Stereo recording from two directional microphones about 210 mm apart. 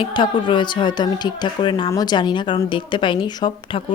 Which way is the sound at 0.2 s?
20° left (ahead or behind).